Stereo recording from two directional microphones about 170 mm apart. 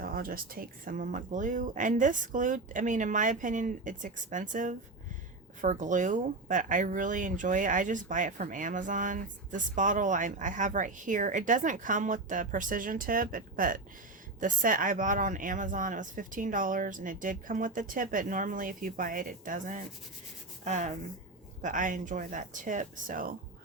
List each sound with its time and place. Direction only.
0.0 s speech: 60° right (ahead or behind)